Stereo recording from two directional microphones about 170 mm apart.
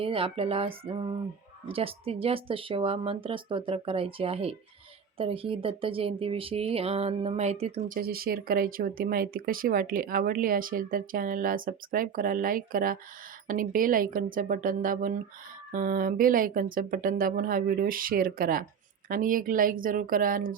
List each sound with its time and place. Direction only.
0.0 s speech: 35° right (ahead or behind)
7.9 s speech: 60° right (ahead or behind)